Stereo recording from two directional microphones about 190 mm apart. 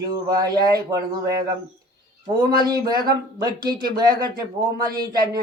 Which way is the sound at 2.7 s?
20° right (ahead or behind).